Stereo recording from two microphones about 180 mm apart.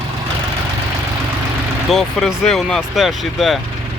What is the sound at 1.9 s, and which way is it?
Speech, centre (ahead or behind).